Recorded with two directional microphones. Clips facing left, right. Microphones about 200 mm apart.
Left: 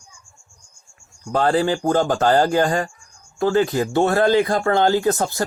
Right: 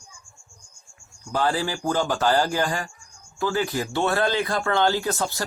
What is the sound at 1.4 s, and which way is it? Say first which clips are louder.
Speech: left 6 dB; 55° left (ahead or behind).